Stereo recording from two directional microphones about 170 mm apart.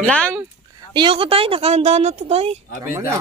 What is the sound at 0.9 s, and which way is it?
Speech, 30° right (ahead or behind).